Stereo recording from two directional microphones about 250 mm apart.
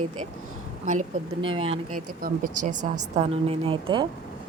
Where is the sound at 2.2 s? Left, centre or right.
Right.